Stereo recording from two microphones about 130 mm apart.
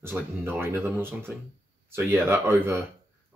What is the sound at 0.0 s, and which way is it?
Speech, 15° right (ahead or behind).